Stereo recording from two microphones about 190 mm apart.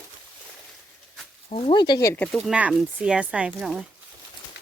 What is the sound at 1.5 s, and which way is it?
Speech, 30° left (ahead or behind).